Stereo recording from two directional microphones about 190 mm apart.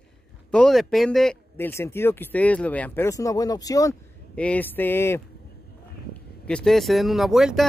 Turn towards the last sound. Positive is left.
turn(degrees=0)  # may be behind; listen again after turning